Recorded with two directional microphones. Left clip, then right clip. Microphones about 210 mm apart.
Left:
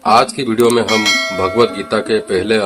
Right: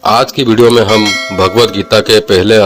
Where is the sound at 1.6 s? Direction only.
35° right (ahead or behind).